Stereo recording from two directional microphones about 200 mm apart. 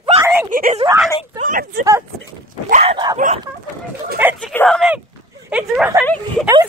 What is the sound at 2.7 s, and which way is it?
Dog, 35° right (ahead or behind).